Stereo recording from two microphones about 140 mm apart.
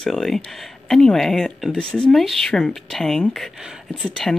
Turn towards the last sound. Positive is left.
turn(degrees=0)  # may be behind; listen again after turning